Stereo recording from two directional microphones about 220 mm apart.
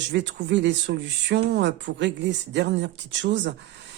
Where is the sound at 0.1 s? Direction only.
55° right (ahead or behind).